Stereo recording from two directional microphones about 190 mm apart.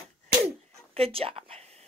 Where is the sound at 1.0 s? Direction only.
30° right (ahead or behind).